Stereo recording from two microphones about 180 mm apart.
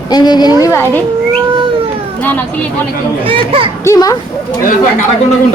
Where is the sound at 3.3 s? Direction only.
30° right (ahead or behind).